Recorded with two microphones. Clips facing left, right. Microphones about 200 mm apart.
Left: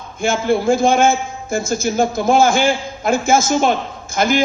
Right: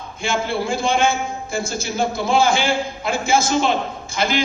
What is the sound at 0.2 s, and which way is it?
A man's voice, 45° left (ahead or behind).